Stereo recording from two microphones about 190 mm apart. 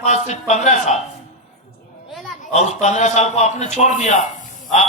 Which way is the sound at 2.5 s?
35° left (ahead or behind).